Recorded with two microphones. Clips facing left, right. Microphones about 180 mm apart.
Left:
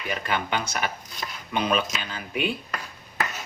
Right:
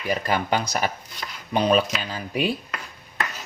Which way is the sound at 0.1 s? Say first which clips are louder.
Right 4 dB; 40° right (ahead or behind).